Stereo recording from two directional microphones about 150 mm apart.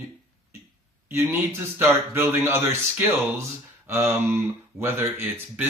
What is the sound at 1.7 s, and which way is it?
Speech, 15° right (ahead or behind).